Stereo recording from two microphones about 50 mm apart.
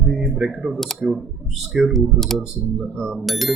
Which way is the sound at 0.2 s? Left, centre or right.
Centre.